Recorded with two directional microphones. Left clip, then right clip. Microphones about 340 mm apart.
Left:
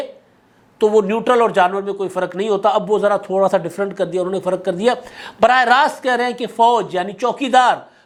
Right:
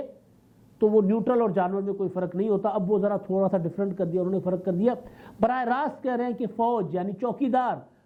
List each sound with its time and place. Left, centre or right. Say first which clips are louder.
0.8 s a man's voice: left 7 dB; centre